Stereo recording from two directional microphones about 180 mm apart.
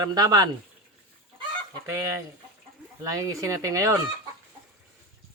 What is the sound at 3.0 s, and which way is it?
Speech, 20° right (ahead or behind).